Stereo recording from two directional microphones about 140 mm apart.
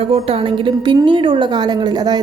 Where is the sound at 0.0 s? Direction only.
45° right (ahead or behind).